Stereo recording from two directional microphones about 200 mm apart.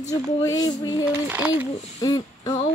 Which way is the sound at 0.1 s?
15° left (ahead or behind).